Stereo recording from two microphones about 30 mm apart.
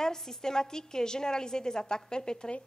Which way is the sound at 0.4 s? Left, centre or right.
Centre.